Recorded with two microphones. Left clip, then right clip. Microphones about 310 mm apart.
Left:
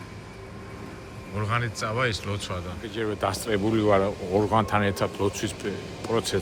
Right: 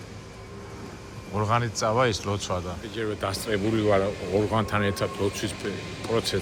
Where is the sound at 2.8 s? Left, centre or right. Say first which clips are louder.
Left 2 dB; centre.